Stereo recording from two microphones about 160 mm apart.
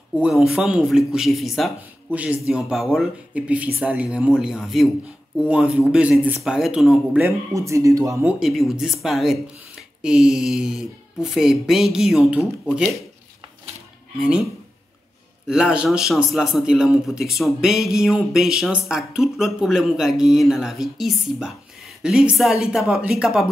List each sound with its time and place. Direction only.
0.1 s speech: 5° right (ahead or behind)
7.2 s speech: 20° right (ahead or behind)
8.4 s speech: centre (ahead or behind)
14.1 s speech: 5° right (ahead or behind)